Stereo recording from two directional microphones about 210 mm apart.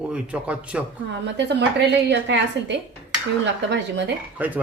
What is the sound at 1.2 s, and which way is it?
A woman's voice, 55° right (ahead or behind).